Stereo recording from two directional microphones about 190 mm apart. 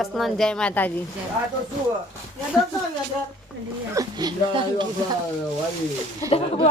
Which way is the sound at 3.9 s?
20° right (ahead or behind).